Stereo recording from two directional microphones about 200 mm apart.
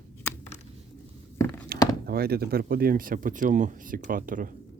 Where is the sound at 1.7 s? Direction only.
50° right (ahead or behind).